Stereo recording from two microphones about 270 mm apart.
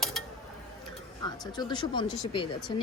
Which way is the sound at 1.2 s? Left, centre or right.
Centre.